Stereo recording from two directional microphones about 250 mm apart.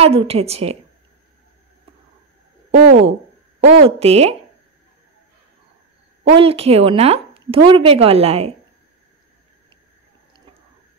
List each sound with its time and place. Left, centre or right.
0.0 s speech: right
2.9 s speech: right
3.6 s speech: right
6.2 s speech: right